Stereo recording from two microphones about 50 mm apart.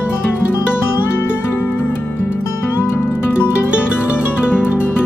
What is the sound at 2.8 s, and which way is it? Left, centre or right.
Music, left.